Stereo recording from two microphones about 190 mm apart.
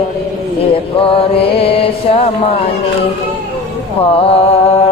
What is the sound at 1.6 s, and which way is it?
Mantra, 30° left (ahead or behind).